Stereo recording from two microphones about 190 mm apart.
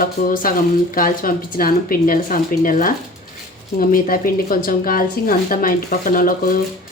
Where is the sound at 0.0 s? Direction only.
45° left (ahead or behind).